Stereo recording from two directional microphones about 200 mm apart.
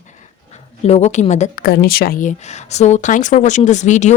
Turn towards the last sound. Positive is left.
turn(degrees=35)  # may be behind; listen again after turning